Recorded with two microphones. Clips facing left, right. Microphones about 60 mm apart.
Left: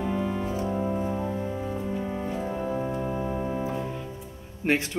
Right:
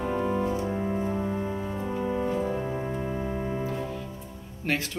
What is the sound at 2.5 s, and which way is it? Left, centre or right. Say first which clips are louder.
Organ: left 1 dB; centre.